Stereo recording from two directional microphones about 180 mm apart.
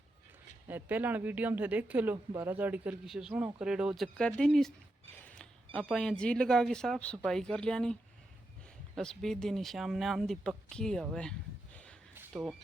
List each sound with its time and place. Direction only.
0.7 s speech: 10° right (ahead or behind)
5.1 s a sound: 5° left (ahead or behind)
5.7 s speech: 5° left (ahead or behind)
9.0 s speech: 5° left (ahead or behind)